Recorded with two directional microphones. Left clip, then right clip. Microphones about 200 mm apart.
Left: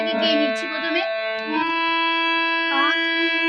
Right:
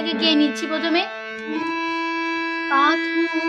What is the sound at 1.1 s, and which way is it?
Music, 20° right (ahead or behind).